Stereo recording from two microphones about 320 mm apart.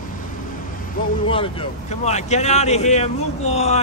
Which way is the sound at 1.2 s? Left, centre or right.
Centre.